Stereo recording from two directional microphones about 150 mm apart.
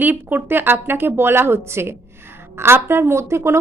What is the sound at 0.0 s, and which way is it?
Speech, 15° right (ahead or behind).